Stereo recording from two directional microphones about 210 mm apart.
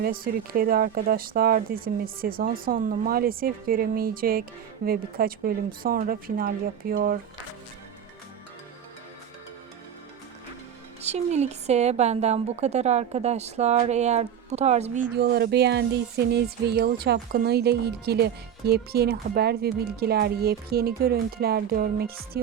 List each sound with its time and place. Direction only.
0.0 s speech: 45° right (ahead or behind)
11.0 s a woman's voice: 30° right (ahead or behind)
15.1 s speech: 50° right (ahead or behind)